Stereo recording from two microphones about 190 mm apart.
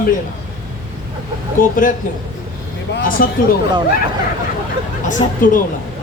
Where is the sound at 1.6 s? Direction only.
45° left (ahead or behind).